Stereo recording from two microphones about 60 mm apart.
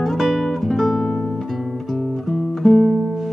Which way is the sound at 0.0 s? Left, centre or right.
Centre.